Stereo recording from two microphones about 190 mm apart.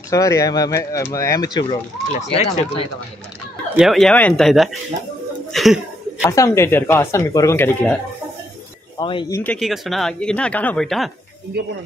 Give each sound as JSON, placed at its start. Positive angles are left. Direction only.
{"t": 0.1, "sound": "speech", "side_deg": 15}
{"t": 3.7, "sound": "speech", "side_deg": 0}
{"t": 5.5, "sound": "a sound", "side_deg": 0}
{"t": 6.2, "sound": "speech", "side_deg": 15}
{"t": 9.0, "sound": "speech", "side_deg": 25}
{"t": 9.4, "sound": "speech", "side_deg": 5}
{"t": 11.6, "sound": "speech", "side_deg": -60}